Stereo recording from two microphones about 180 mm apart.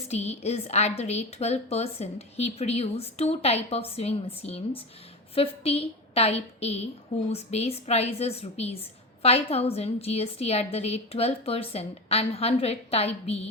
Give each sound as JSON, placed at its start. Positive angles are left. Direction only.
{"t": 0.1, "sound": "a woman's voice", "side_deg": 35}